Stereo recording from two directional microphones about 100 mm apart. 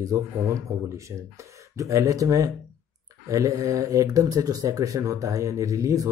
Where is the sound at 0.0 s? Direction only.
35° right (ahead or behind).